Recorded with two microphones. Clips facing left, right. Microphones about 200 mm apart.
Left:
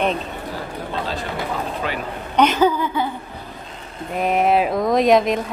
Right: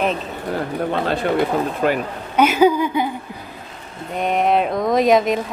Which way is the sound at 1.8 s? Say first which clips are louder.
Right 10 dB; 50° right (ahead or behind).